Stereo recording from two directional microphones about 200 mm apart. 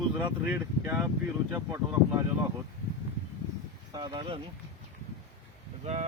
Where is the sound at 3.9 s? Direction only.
20° right (ahead or behind).